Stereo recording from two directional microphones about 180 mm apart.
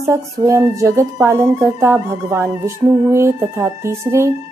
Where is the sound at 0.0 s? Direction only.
15° right (ahead or behind).